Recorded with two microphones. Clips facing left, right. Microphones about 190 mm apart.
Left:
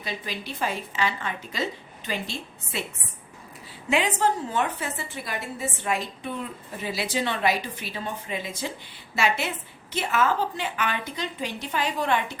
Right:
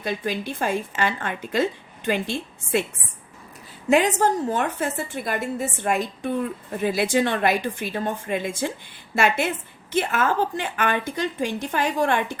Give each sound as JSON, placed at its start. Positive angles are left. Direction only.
{"t": 0.0, "sound": "a woman's voice", "side_deg": -50}
{"t": 3.8, "sound": "a woman's voice", "side_deg": -45}